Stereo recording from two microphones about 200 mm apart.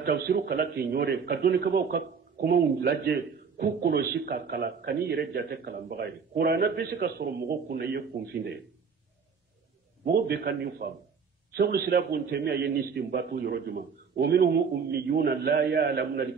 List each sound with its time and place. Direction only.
0.0 s a man's voice: 55° right (ahead or behind)
10.0 s a man's voice: 50° right (ahead or behind)